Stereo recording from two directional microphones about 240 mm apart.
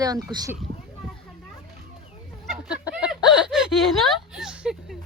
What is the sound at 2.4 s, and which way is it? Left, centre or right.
Chicken, centre.